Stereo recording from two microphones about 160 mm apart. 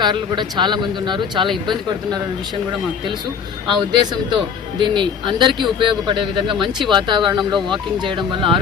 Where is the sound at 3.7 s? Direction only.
30° right (ahead or behind).